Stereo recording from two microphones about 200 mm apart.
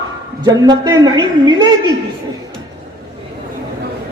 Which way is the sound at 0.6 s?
20° right (ahead or behind).